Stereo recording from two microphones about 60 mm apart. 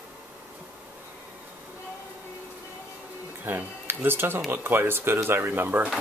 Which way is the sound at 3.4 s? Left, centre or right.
Right.